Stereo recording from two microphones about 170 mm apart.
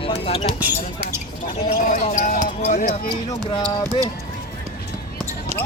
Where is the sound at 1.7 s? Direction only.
50° left (ahead or behind).